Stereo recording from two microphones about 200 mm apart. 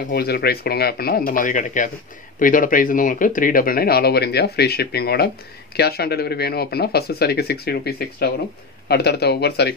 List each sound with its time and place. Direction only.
0.1 s speech: 50° left (ahead or behind)